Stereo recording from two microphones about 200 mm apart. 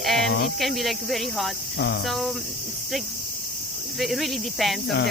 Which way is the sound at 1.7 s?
60° left (ahead or behind).